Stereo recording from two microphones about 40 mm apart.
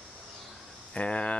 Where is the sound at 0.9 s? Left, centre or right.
Left.